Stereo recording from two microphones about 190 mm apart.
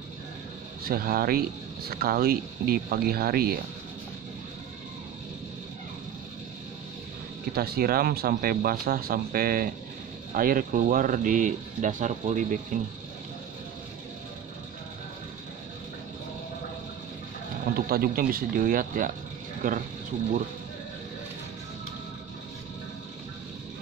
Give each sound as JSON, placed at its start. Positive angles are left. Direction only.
{"t": 0.8, "sound": "speech", "side_deg": -50}
{"t": 7.5, "sound": "speech", "side_deg": -55}
{"t": 17.7, "sound": "speech", "side_deg": -50}